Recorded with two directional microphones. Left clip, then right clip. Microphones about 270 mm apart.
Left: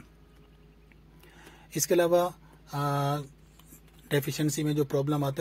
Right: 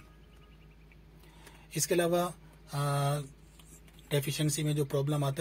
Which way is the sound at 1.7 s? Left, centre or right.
Centre.